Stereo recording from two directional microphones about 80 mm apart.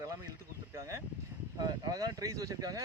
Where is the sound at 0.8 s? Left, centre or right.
Right.